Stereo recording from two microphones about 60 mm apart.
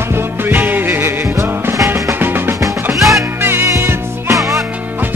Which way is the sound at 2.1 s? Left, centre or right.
Right.